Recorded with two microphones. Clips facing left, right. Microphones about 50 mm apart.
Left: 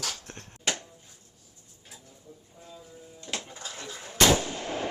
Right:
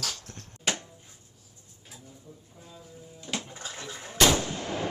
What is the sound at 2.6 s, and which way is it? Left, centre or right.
Music, centre.